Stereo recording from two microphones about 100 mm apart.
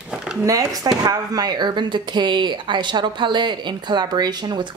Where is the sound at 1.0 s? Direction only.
40° right (ahead or behind).